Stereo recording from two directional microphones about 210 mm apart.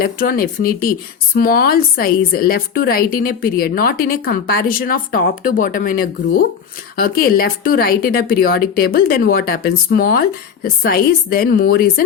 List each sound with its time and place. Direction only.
0.0 s speech: 45° left (ahead or behind)